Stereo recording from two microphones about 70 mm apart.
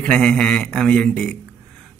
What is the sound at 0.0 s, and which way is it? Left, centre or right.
Speech, centre.